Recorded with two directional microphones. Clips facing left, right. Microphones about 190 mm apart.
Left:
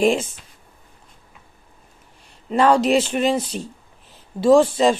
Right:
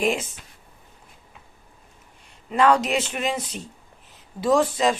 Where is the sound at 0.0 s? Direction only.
30° left (ahead or behind).